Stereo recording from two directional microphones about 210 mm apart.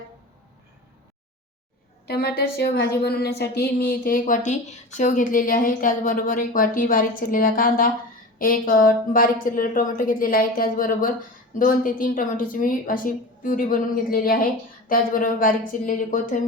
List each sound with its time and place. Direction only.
2.0 s a woman's voice: 50° left (ahead or behind)